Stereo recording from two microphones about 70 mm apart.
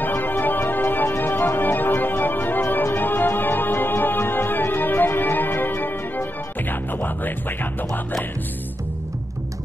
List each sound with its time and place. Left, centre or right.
0.0 s music: left